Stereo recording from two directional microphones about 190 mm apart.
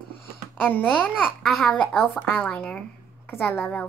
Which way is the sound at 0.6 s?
10° left (ahead or behind).